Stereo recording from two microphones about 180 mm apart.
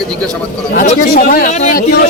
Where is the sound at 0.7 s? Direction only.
50° left (ahead or behind).